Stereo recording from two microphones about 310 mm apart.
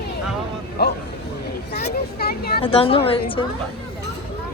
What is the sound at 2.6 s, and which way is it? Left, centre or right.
Speech, centre.